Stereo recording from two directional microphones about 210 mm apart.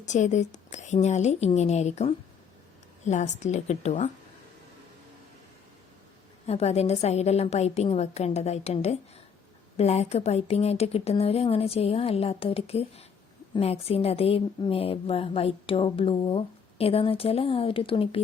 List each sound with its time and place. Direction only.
0.0 s a woman's voice: 35° left (ahead or behind)
6.4 s a woman's voice: 30° left (ahead or behind)